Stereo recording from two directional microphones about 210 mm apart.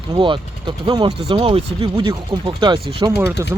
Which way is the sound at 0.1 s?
25° right (ahead or behind).